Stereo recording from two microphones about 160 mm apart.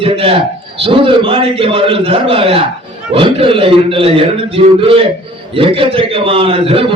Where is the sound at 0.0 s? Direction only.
35° right (ahead or behind).